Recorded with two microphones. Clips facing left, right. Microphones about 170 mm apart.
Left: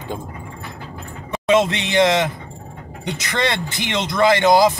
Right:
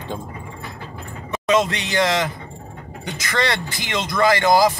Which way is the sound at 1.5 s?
25° left (ahead or behind).